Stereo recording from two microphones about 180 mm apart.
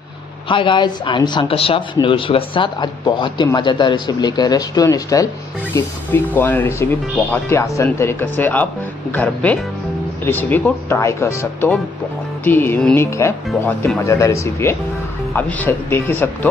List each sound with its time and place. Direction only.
0.5 s speech: 25° left (ahead or behind); by 16.3 s 10° left (ahead or behind)